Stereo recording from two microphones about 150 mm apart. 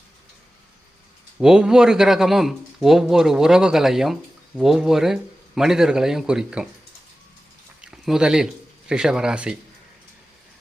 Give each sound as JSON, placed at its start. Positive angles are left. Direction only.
{"t": 1.4, "sound": "speech", "side_deg": -5}
{"t": 7.8, "sound": "a sound", "side_deg": -5}
{"t": 8.9, "sound": "speech", "side_deg": -5}